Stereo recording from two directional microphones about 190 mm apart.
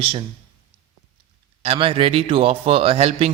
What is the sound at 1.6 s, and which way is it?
A man's voice, 30° right (ahead or behind).